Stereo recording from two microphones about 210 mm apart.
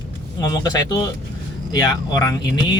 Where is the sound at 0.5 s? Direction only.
20° left (ahead or behind).